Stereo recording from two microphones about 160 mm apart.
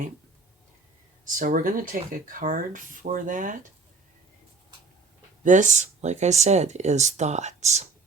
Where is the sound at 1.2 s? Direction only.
60° right (ahead or behind).